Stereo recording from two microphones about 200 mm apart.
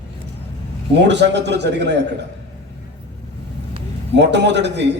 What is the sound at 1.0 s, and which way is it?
A man's voice, 60° right (ahead or behind).